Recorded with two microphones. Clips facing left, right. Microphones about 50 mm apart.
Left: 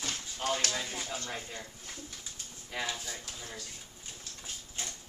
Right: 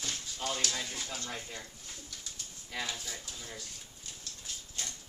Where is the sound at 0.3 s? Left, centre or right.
Left.